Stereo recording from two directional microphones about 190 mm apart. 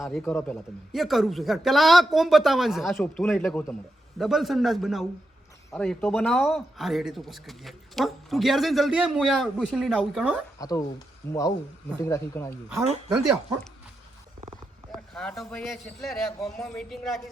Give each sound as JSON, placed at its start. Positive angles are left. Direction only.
{"t": 0.0, "sound": "speech", "side_deg": 0}
{"t": 10.6, "sound": "speech", "side_deg": 20}
{"t": 14.9, "sound": "speech", "side_deg": 5}